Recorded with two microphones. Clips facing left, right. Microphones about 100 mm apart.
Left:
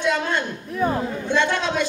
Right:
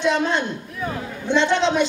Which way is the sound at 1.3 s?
20° right (ahead or behind).